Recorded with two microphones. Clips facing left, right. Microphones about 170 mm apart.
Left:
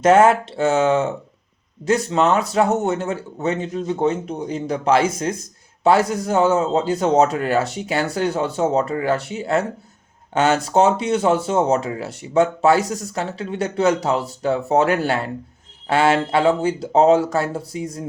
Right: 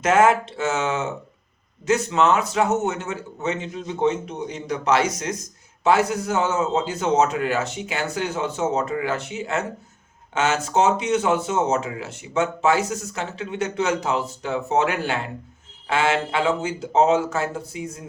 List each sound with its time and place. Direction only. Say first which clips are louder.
0.0 s speech: left 4 dB; 35° left (ahead or behind)